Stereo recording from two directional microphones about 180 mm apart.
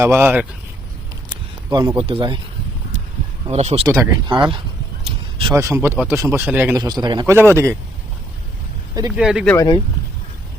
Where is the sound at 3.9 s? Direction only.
20° right (ahead or behind).